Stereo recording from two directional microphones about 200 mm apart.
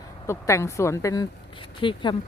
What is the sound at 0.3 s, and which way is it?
Speech, 15° left (ahead or behind).